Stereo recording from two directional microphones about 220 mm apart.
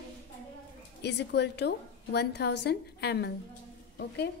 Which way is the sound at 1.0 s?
50° left (ahead or behind).